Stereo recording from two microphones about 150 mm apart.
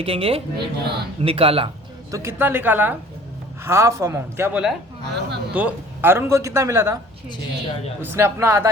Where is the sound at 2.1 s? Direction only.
15° right (ahead or behind).